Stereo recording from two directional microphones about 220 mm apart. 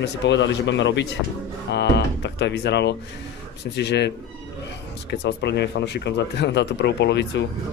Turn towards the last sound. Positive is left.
turn(degrees=50)  # may be behind; listen again after turning